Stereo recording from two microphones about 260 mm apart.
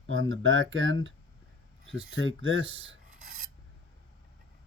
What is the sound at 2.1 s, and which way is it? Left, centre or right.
Speech, right.